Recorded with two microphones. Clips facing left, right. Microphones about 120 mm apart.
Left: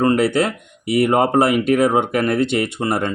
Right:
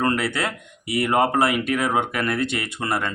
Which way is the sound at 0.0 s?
25° left (ahead or behind).